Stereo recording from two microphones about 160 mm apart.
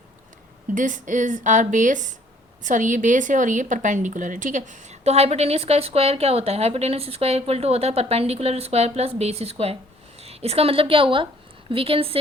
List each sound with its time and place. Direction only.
0.7 s a woman's voice: 55° right (ahead or behind); by 12.1 s 35° right (ahead or behind)